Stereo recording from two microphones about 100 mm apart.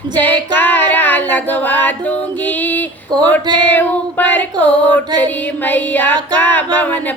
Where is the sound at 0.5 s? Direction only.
20° left (ahead or behind).